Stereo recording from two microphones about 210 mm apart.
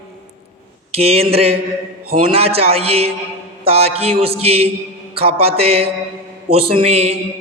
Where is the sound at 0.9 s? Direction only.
30° right (ahead or behind).